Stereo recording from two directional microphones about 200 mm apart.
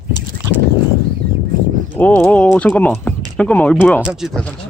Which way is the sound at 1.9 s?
5° left (ahead or behind).